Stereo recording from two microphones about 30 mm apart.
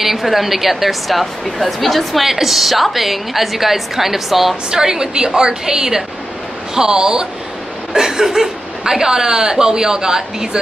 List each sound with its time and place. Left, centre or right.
0.0 s a woman's voice: centre
2.2 s a woman's voice: centre
4.6 s speech: right